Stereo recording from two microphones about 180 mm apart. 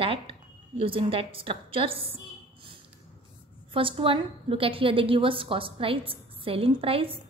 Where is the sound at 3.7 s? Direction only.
30° right (ahead or behind).